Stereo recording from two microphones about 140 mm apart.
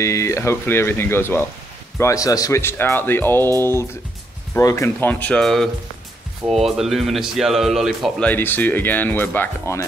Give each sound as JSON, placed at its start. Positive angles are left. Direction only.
{"t": 0.0, "sound": "speech", "side_deg": 20}
{"t": 4.6, "sound": "speech", "side_deg": 20}
{"t": 8.3, "sound": "speech", "side_deg": 15}